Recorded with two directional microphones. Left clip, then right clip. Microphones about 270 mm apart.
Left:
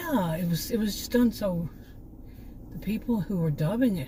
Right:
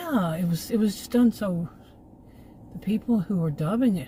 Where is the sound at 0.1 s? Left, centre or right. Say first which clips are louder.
Right 1 dB; right.